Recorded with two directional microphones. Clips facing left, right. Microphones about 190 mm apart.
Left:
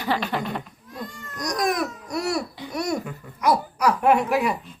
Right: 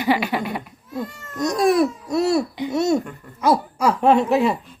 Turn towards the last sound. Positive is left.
turn(degrees=-25)  # may be behind; listen again after turning